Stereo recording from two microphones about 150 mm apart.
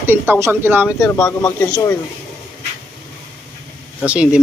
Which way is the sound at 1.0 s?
20° left (ahead or behind).